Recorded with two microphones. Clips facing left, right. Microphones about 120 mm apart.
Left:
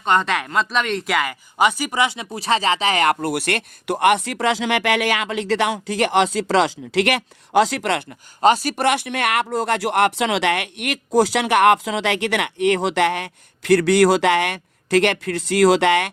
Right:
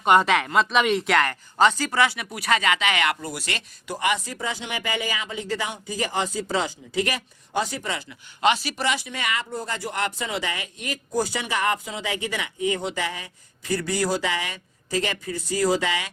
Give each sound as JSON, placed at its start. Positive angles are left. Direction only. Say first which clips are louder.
{"t": 0.0, "sound": "speech", "louder": "right 1 dB", "side_deg": -10}
{"t": 3.2, "sound": "speech", "louder": "left 10 dB", "side_deg": 65}
{"t": 8.4, "sound": "speech", "louder": "left 6 dB", "side_deg": 40}